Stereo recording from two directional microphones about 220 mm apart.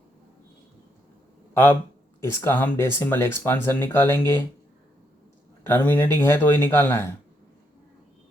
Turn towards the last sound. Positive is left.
turn(degrees=10)  # may be behind; listen again after turning